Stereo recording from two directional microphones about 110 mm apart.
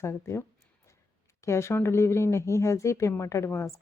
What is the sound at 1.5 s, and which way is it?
Speech, 25° left (ahead or behind).